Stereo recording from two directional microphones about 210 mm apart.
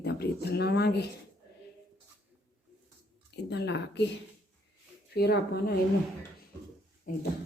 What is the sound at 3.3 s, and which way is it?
Speech, 55° left (ahead or behind).